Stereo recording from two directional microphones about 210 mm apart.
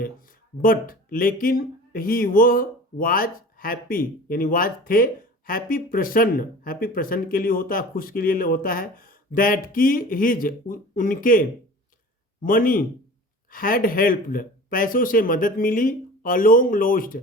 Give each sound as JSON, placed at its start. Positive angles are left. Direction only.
{"t": 0.6, "sound": "speech", "side_deg": 40}